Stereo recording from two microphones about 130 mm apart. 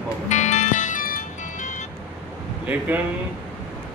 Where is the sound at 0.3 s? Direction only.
65° left (ahead or behind).